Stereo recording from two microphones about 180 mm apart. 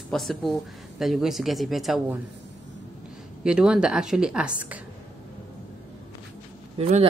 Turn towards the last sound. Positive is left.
turn(degrees=-35)  # may be behind; listen again after turning